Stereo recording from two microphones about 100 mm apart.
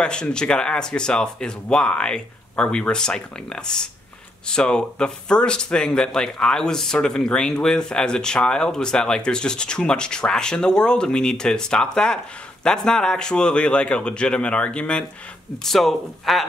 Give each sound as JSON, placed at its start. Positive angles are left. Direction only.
{"t": 0.0, "sound": "speech", "side_deg": 10}